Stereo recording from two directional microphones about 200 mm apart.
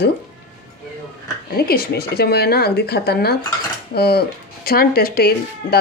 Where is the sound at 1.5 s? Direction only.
50° left (ahead or behind).